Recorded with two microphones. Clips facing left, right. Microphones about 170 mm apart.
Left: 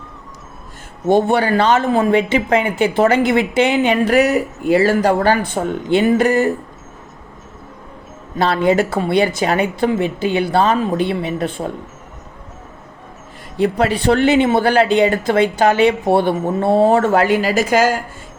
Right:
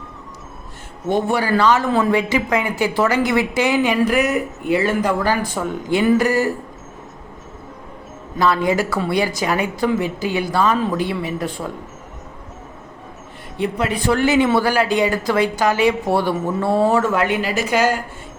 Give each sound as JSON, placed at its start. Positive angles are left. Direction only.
{"t": 1.3, "sound": "a woman's voice", "side_deg": 25}
{"t": 8.4, "sound": "a woman's voice", "side_deg": 25}
{"t": 11.6, "sound": "speech", "side_deg": 35}
{"t": 13.7, "sound": "a woman's voice", "side_deg": 35}
{"t": 17.1, "sound": "speech", "side_deg": 35}
{"t": 17.4, "sound": "speech", "side_deg": 90}